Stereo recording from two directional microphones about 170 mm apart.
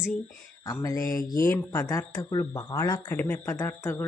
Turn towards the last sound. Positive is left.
turn(degrees=15)  # may be behind; listen again after turning